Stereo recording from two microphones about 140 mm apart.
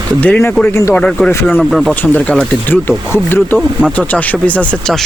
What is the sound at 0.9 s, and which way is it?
Speech, 5° left (ahead or behind).